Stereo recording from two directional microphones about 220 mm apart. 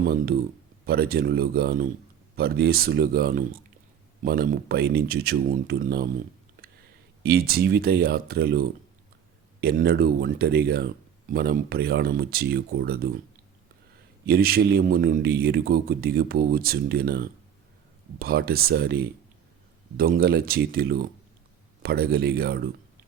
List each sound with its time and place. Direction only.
0.0 s speech: 40° right (ahead or behind)
7.2 s speech: 45° right (ahead or behind)
14.3 s speech: 45° right (ahead or behind)